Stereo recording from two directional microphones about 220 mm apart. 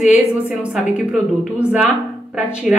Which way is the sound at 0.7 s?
5° right (ahead or behind).